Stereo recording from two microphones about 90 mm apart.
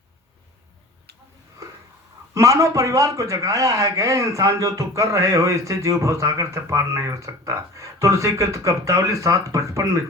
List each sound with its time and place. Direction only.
2.3 s a man's voice: 35° right (ahead or behind)